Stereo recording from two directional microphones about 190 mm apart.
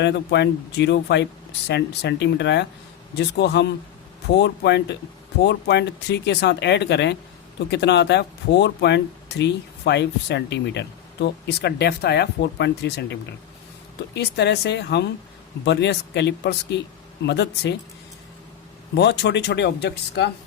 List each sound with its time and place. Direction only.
0.0 s speech: 65° left (ahead or behind)
18.9 s speech: 65° left (ahead or behind)